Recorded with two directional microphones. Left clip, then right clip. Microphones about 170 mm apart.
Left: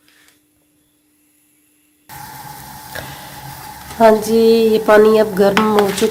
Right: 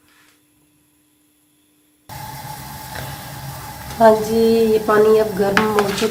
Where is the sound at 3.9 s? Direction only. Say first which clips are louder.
Left 2 dB; 45° left (ahead or behind).